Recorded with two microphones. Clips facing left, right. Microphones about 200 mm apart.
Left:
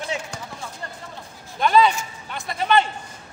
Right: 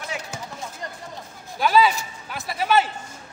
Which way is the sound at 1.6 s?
5° right (ahead or behind).